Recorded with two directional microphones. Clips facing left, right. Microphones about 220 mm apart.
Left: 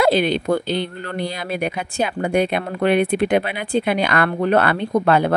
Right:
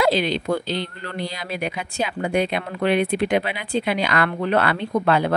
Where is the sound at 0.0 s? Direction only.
55° left (ahead or behind).